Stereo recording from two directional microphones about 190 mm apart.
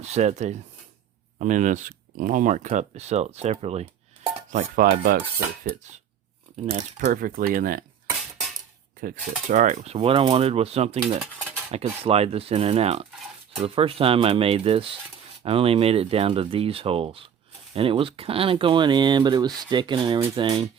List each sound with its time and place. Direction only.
0.0 s speech: 35° right (ahead or behind)
4.4 s cutlery: 45° right (ahead or behind)
6.7 s speech: 40° right (ahead or behind)
9.5 s speech: 40° right (ahead or behind)